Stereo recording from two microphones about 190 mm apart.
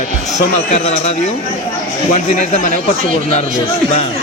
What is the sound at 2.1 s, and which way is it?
Speech, 35° left (ahead or behind).